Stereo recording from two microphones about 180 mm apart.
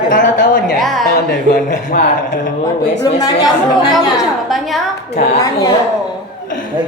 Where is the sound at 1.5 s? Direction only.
45° left (ahead or behind).